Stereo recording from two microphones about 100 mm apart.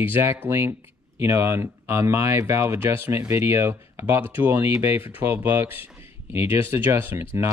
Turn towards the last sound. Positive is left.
turn(degrees=-25)  # may be behind; listen again after turning